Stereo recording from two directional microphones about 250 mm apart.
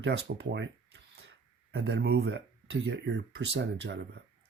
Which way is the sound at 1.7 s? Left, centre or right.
Right.